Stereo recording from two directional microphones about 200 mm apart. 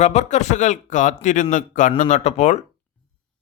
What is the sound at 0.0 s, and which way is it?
Speech, 35° left (ahead or behind).